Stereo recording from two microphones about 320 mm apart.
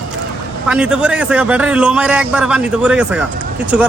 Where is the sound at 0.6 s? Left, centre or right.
Centre.